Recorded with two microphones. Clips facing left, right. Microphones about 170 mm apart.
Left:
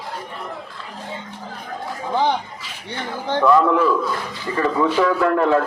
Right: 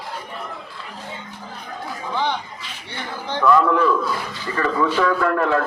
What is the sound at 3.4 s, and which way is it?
A man's voice, 25° left (ahead or behind).